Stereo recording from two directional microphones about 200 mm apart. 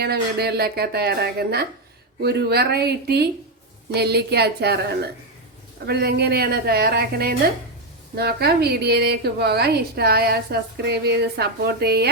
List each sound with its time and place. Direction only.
0.0 s a woman's voice: 55° right (ahead or behind)